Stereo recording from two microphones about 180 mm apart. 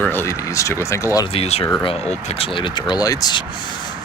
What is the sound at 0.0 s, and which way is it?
Speech, 10° left (ahead or behind).